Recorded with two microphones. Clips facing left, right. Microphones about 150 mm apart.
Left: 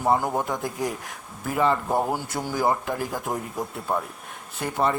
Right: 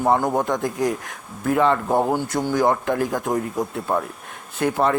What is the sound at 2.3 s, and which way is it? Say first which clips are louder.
Speech: right 5 dB; 5° left (ahead or behind).